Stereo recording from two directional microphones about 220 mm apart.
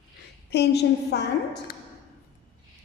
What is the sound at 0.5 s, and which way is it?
A woman's voice, 50° left (ahead or behind).